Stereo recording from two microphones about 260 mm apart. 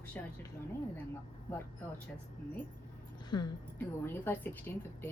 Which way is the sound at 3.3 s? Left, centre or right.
Centre.